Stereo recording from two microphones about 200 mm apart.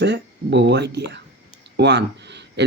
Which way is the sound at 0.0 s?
60° right (ahead or behind).